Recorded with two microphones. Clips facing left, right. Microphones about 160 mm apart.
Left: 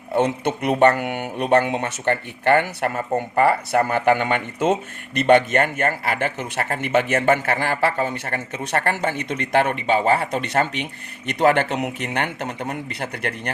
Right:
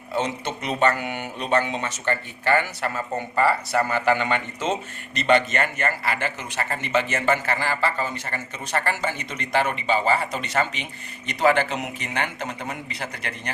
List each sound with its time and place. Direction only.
0.1 s speech: 55° left (ahead or behind)